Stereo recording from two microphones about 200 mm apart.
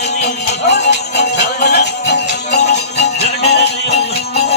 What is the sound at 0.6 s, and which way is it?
Music, 55° left (ahead or behind).